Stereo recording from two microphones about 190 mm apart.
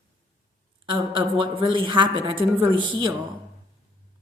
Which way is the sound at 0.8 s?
25° right (ahead or behind).